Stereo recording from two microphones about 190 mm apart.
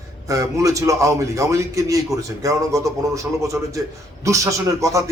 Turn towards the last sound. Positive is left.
turn(degrees=-15)  # may be behind; listen again after turning